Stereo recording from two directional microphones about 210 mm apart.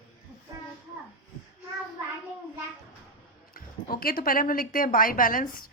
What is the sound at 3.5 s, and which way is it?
A woman's voice, 45° left (ahead or behind).